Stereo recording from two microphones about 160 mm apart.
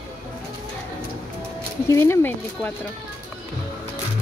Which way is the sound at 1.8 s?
15° left (ahead or behind).